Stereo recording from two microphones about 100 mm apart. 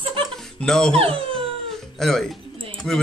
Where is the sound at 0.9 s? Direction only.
70° right (ahead or behind).